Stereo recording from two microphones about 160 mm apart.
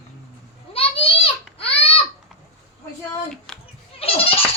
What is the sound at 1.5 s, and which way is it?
Crying, 35° left (ahead or behind).